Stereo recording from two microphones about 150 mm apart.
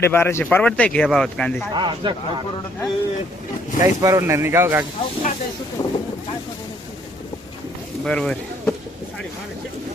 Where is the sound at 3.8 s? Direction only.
20° right (ahead or behind).